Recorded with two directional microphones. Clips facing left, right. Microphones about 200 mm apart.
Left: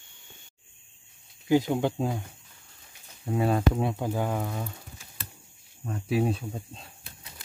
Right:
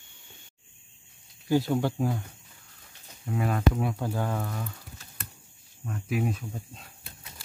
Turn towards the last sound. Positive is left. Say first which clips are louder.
# left 2 dB
turn(degrees=30)  # may be behind; listen again after turning